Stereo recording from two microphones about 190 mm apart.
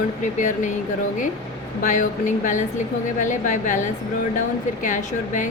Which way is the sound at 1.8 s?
40° left (ahead or behind).